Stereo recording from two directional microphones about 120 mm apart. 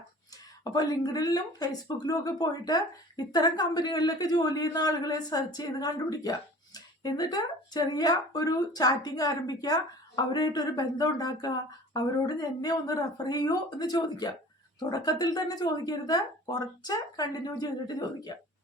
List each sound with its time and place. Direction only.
0.6 s speech: 35° left (ahead or behind)